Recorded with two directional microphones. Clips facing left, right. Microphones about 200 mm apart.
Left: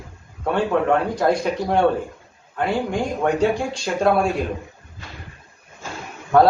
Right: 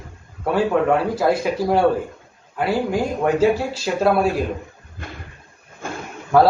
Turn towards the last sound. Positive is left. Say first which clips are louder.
# even
turn(degrees=-5)  # may be behind; listen again after turning